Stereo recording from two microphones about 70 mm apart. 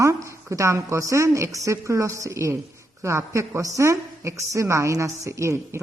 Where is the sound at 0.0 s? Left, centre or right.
Right.